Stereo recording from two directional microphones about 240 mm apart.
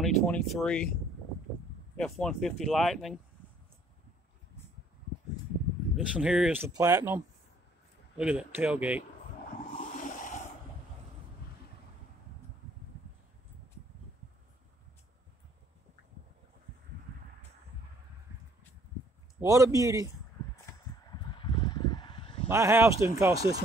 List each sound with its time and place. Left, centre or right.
0.0 s speech: centre
2.0 s speech: centre
5.9 s speech: centre
8.2 s speech: centre
9.9 s a sound: left
19.4 s speech: centre
21.3 s a sound: centre
22.5 s speech: centre